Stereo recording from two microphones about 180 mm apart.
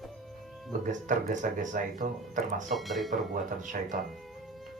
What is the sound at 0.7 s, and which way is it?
Speech, 45° right (ahead or behind).